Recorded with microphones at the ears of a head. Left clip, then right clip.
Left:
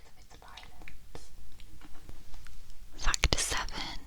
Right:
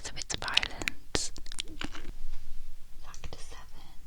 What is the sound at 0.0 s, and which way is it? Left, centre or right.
Whispering, right.